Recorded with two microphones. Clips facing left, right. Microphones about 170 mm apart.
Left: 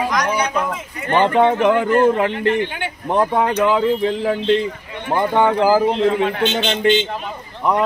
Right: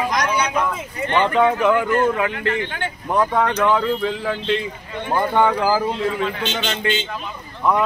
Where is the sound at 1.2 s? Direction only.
25° left (ahead or behind).